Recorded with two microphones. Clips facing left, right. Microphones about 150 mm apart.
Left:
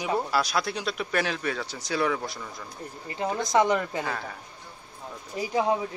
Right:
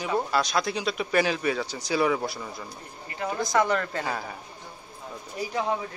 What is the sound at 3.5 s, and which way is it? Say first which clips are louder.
Speech: left 2 dB; 20° left (ahead or behind).